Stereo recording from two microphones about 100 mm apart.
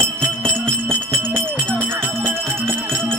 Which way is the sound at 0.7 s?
20° right (ahead or behind).